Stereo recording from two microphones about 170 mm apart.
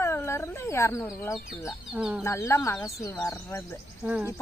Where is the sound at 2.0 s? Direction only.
5° right (ahead or behind).